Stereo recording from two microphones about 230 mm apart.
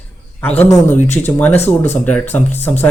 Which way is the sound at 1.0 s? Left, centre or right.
Left.